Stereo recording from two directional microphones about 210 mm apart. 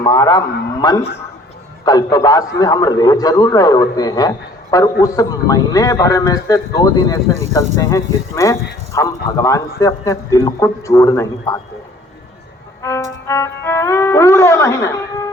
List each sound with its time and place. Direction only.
0.0 s a man's voice: 20° left (ahead or behind)
12.8 s music: 15° left (ahead or behind)